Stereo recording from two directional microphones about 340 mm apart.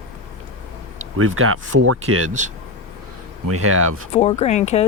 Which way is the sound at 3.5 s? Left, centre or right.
Right.